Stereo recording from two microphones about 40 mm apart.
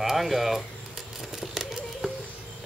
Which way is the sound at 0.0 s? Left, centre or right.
Centre.